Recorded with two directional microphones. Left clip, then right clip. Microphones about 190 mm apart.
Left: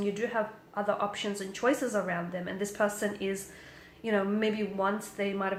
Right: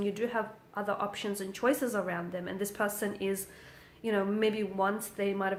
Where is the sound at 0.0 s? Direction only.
35° right (ahead or behind).